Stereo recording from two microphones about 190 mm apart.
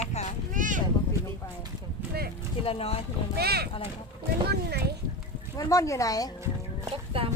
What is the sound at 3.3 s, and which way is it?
Speech, 55° right (ahead or behind).